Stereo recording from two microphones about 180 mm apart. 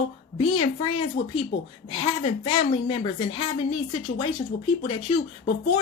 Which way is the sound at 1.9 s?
35° left (ahead or behind).